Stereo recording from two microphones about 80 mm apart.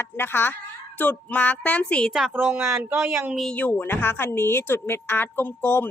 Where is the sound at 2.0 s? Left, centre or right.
Centre.